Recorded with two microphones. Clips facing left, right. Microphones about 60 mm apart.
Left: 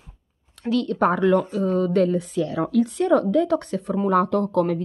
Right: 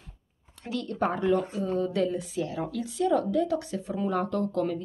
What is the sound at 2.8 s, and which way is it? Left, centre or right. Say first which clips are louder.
Speech: left 5 dB; left.